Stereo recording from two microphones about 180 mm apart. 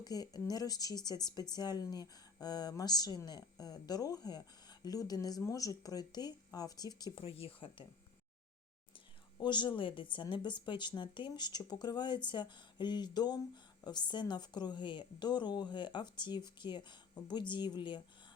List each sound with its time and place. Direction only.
0.0 s speech: 20° left (ahead or behind)
9.4 s speech: 25° left (ahead or behind)